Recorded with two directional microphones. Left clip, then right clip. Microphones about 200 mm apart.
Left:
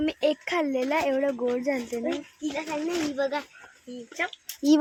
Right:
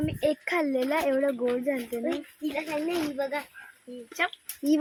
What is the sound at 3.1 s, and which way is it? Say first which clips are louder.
Speech: left 3 dB; 40° left (ahead or behind).